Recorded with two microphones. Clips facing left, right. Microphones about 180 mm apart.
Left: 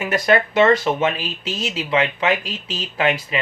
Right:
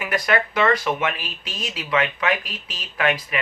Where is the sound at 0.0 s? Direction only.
25° left (ahead or behind).